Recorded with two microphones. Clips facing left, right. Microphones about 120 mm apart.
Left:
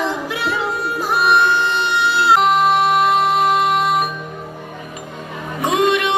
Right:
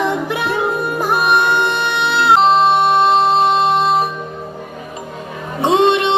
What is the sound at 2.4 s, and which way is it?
Music, 30° right (ahead or behind).